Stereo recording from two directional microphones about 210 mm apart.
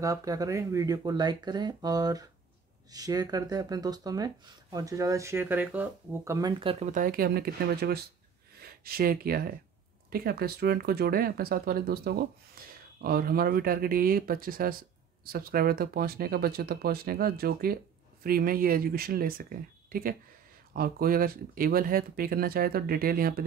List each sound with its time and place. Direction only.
0.0 s speech: 15° right (ahead or behind)
6.6 s speech: 30° right (ahead or behind); by 23.4 s 45° right (ahead or behind)